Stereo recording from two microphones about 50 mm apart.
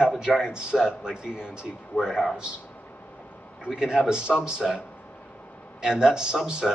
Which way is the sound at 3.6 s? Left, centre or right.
Centre.